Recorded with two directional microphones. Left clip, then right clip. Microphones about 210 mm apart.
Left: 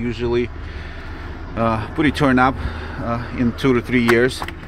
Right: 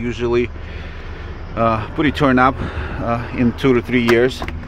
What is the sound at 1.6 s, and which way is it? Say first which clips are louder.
Speech: right 2 dB; 5° left (ahead or behind).